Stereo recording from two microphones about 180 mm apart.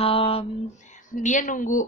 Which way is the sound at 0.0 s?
30° left (ahead or behind).